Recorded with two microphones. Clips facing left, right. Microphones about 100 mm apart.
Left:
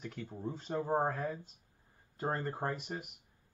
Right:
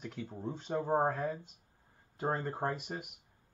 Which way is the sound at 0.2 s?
20° right (ahead or behind).